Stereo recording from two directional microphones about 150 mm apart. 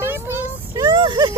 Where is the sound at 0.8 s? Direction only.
30° right (ahead or behind).